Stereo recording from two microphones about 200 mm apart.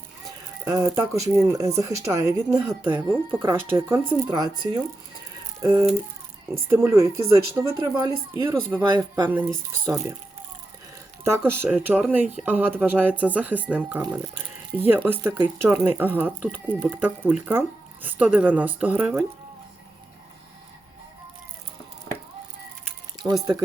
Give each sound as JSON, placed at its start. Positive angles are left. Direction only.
{"t": 0.3, "sound": "speech", "side_deg": -15}
{"t": 5.6, "sound": "speech", "side_deg": -15}
{"t": 11.2, "sound": "speech", "side_deg": -10}
{"t": 23.2, "sound": "speech", "side_deg": -15}